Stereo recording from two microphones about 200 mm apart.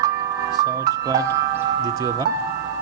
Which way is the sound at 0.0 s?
15° right (ahead or behind).